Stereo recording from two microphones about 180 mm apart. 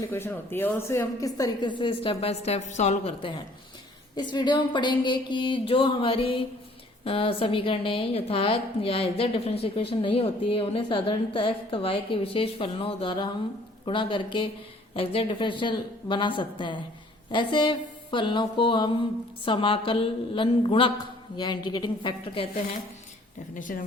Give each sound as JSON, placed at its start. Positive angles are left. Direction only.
{"t": 0.1, "sound": "a woman's voice", "side_deg": 15}
{"t": 23.6, "sound": "speech", "side_deg": 45}